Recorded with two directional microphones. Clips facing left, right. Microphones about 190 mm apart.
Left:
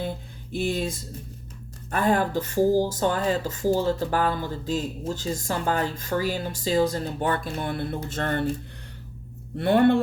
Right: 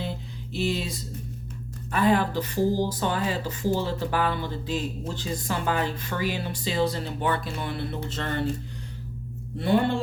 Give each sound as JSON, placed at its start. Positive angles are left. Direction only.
{"t": 0.5, "sound": "speech", "side_deg": 50}
{"t": 9.6, "sound": "speech", "side_deg": 60}